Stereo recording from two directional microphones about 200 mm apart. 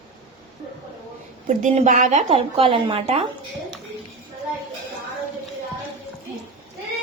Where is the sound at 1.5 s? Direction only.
40° right (ahead or behind).